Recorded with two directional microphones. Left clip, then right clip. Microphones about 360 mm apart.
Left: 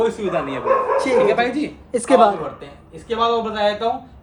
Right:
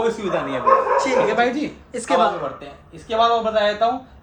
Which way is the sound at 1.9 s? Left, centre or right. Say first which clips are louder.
Left 5 dB; centre.